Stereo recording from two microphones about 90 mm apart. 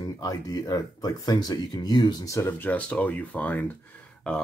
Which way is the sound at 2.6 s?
15° left (ahead or behind).